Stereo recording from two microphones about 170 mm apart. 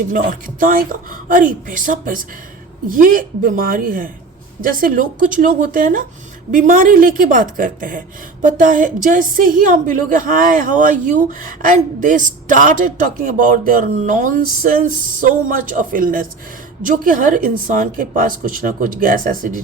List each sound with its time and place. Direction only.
0.1 s a woman's voice: 55° right (ahead or behind)